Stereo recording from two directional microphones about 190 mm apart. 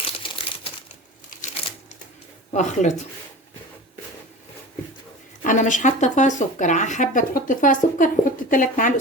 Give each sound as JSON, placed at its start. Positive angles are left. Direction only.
{"t": 0.2, "sound": "crumpling", "side_deg": 25}
{"t": 2.5, "sound": "speech", "side_deg": 40}
{"t": 5.4, "sound": "speech", "side_deg": 40}